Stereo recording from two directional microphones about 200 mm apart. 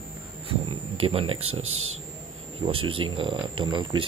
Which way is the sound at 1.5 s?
30° right (ahead or behind).